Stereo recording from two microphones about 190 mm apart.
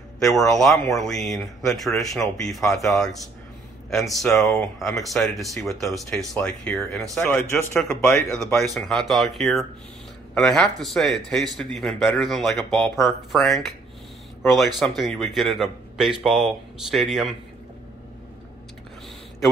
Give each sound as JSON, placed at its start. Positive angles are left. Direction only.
{"t": 0.4, "sound": "speech", "side_deg": 0}
{"t": 7.4, "sound": "speech", "side_deg": 15}
{"t": 14.8, "sound": "speech", "side_deg": 0}